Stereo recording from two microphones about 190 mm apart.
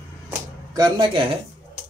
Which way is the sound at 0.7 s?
20° right (ahead or behind).